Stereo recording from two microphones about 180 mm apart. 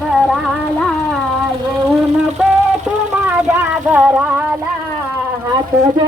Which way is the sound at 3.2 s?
10° right (ahead or behind).